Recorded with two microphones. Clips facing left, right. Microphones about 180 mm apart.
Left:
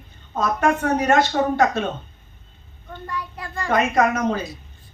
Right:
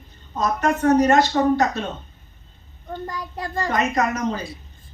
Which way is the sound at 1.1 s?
50° left (ahead or behind).